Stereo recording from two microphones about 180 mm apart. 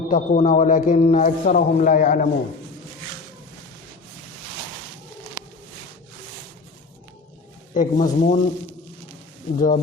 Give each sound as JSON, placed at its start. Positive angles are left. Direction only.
{"t": 0.1, "sound": "a man's voice", "side_deg": 45}
{"t": 7.7, "sound": "a man's voice", "side_deg": 45}
{"t": 9.6, "sound": "a man's voice", "side_deg": 45}